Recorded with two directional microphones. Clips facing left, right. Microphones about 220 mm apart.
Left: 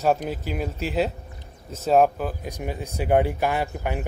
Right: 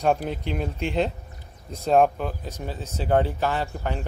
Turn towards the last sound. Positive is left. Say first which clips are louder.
# left 2 dB
turn(degrees=15)  # may be behind; listen again after turning